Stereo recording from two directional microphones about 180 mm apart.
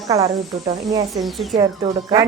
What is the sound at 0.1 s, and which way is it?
Speech, 20° right (ahead or behind).